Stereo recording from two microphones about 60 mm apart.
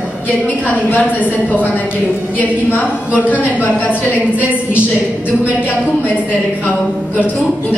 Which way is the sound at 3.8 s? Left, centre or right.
Right.